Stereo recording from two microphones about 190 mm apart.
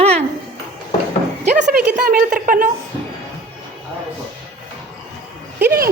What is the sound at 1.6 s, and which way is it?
A woman's voice, 40° right (ahead or behind).